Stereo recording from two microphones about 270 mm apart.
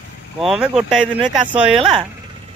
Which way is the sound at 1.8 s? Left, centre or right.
Centre.